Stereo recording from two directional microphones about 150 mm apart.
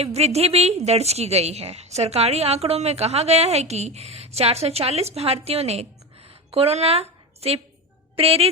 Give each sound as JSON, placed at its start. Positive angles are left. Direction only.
{"t": 0.0, "sound": "a woman's voice", "side_deg": -45}